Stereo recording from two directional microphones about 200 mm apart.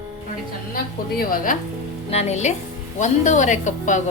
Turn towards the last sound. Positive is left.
turn(degrees=40)  # may be behind; listen again after turning